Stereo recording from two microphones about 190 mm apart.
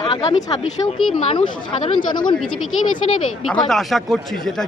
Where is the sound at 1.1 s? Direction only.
30° left (ahead or behind).